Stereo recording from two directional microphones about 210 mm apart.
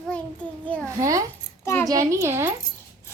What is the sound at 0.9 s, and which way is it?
Speech, 15° right (ahead or behind).